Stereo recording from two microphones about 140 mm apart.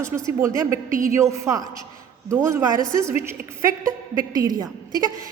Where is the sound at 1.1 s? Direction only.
20° right (ahead or behind).